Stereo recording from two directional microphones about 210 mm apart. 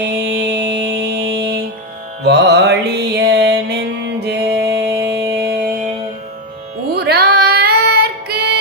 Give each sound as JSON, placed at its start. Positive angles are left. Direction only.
{"t": 0.0, "sound": "music", "side_deg": -55}
{"t": 6.9, "sound": "child singing", "side_deg": -50}